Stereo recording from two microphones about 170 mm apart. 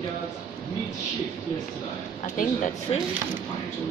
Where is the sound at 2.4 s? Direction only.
50° left (ahead or behind).